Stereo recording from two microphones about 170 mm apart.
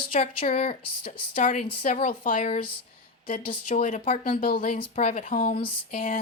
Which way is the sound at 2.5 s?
30° left (ahead or behind).